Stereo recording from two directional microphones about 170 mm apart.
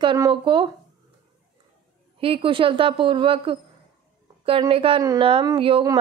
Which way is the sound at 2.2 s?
30° right (ahead or behind).